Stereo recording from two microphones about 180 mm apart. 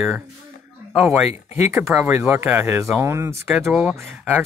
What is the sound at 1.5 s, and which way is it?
Speech, 15° right (ahead or behind).